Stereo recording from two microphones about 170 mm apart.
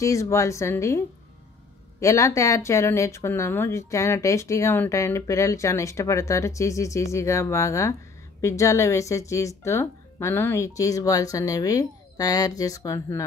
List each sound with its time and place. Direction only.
0.0 s speech: 15° left (ahead or behind)